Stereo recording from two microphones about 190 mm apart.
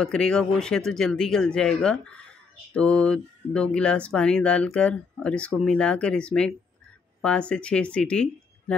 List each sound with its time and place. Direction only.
0.0 s speech: 5° left (ahead or behind)